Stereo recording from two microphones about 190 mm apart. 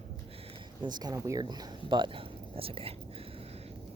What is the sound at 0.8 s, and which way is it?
Speech, 20° right (ahead or behind).